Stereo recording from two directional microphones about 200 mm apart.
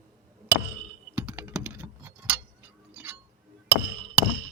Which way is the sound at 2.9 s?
10° right (ahead or behind).